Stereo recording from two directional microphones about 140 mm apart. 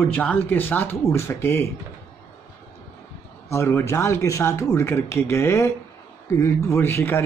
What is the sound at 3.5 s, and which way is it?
Speech, 20° left (ahead or behind).